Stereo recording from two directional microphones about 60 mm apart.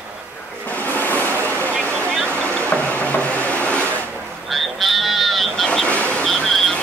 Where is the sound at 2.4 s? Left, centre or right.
Left.